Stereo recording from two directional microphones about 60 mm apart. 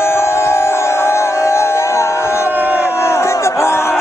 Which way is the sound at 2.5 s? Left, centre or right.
Right.